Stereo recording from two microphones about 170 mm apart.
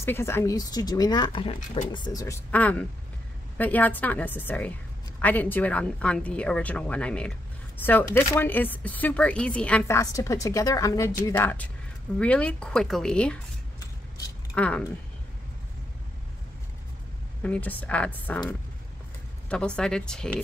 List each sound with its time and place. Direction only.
0.0 s a woman's voice: 15° left (ahead or behind)
14.5 s speech: 5° left (ahead or behind)
17.4 s a woman's voice: 10° left (ahead or behind)
19.5 s speech: 5° left (ahead or behind)